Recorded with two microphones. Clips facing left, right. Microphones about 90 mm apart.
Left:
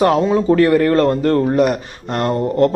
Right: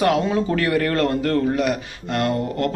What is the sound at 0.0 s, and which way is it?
Speech, 30° left (ahead or behind).